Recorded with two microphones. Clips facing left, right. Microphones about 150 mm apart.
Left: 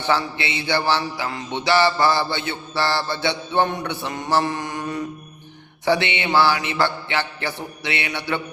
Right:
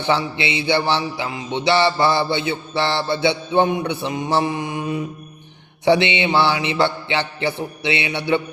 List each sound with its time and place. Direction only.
0.0 s music: 20° right (ahead or behind)
3.5 s mantra: 15° right (ahead or behind)
5.8 s music: 20° right (ahead or behind)